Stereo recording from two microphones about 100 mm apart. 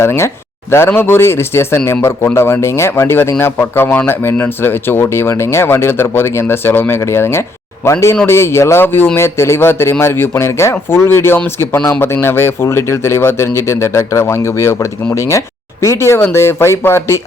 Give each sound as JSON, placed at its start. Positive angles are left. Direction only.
{"t": 0.0, "sound": "speech", "side_deg": 25}